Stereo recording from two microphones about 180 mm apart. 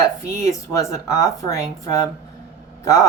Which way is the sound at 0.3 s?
15° left (ahead or behind).